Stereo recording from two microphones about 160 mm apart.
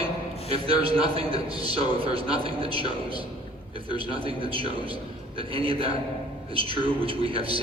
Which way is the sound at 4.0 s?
35° right (ahead or behind).